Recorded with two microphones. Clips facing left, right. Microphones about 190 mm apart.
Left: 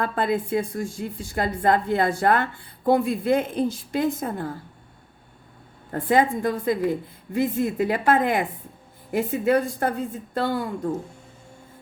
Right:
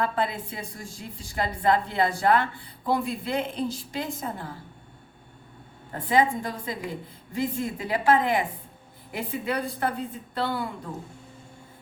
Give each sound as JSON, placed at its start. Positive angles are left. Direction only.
{"t": 0.0, "sound": "a woman's voice", "side_deg": 50}
{"t": 5.9, "sound": "a woman's voice", "side_deg": 50}